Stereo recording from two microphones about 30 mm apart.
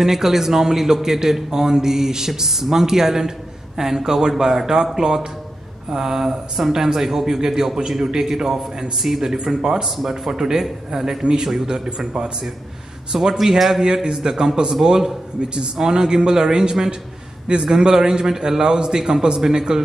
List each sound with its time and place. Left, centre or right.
0.0 s a man's voice: centre
8.9 s a man's voice: centre
13.1 s a man's voice: right
13.4 s a man's voice: centre
13.8 s a man's voice: right
15.5 s a man's voice: right
18.6 s a man's voice: right